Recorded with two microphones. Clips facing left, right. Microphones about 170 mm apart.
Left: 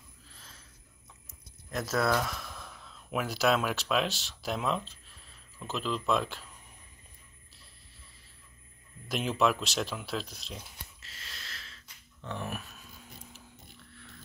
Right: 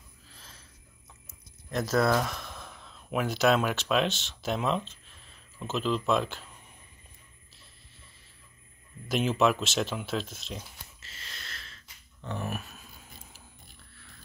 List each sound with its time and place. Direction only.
1.2 s speech: centre (ahead or behind)
9.1 s speech: centre (ahead or behind)